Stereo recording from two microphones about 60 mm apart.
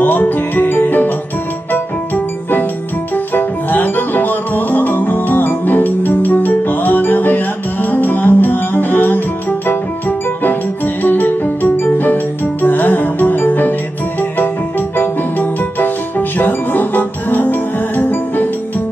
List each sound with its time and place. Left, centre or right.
0.0 s music: left
15.8 s music: left